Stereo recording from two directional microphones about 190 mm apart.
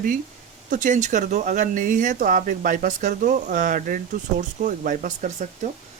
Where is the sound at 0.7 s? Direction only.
45° right (ahead or behind).